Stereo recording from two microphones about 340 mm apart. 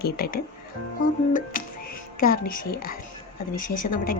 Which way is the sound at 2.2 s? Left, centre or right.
Left.